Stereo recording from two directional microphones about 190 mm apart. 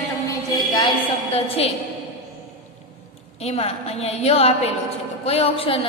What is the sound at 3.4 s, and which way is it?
A woman's voice, 35° left (ahead or behind).